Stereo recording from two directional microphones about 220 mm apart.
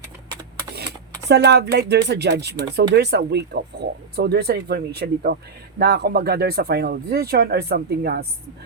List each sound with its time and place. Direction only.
1.3 s speech: 50° right (ahead or behind)